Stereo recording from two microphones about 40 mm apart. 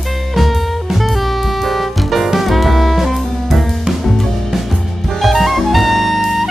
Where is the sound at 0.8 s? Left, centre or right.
Centre.